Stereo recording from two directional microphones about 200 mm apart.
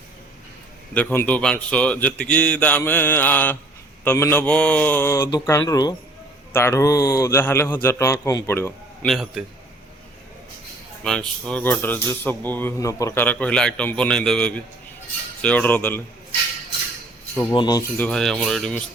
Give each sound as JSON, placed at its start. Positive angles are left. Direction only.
{"t": 0.9, "sound": "speech", "side_deg": 10}
{"t": 9.0, "sound": "speech", "side_deg": 0}
{"t": 11.0, "sound": "speech", "side_deg": 5}
{"t": 17.5, "sound": "speech", "side_deg": 20}
{"t": 18.0, "sound": "speech", "side_deg": 5}